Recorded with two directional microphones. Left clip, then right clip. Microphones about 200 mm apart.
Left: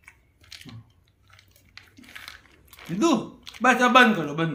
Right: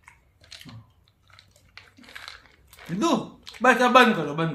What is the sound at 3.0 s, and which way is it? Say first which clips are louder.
Speech: left 1 dB; 20° right (ahead or behind).